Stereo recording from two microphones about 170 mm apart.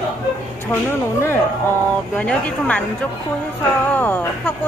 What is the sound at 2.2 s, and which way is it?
Speech, 10° left (ahead or behind).